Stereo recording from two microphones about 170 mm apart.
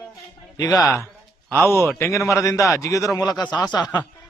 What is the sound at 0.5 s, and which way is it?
Speech, 25° left (ahead or behind).